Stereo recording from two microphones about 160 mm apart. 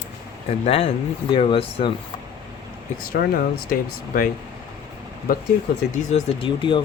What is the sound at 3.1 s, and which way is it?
Speech, 75° left (ahead or behind).